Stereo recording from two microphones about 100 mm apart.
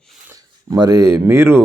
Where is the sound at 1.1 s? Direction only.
25° right (ahead or behind).